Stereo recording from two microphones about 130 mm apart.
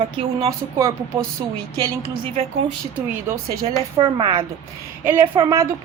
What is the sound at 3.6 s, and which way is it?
Speech, 40° right (ahead or behind).